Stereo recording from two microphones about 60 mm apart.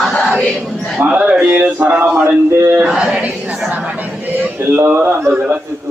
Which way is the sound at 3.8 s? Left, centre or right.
Right.